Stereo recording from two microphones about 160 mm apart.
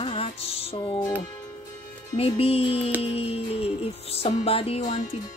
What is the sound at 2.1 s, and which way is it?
Music, 40° left (ahead or behind).